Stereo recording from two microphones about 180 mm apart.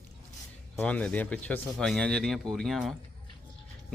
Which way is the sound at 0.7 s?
10° left (ahead or behind).